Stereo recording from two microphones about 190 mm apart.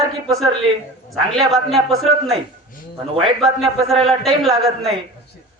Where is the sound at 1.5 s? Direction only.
Centre (ahead or behind).